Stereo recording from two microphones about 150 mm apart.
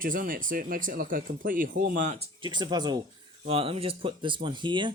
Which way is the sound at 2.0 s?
45° right (ahead or behind).